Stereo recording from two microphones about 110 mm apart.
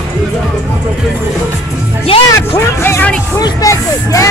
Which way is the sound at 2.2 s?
25° left (ahead or behind).